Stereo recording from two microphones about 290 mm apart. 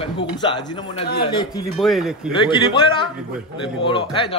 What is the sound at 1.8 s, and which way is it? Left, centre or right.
Speech, centre.